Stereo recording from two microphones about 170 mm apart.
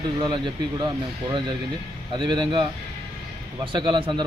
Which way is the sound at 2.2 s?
30° right (ahead or behind).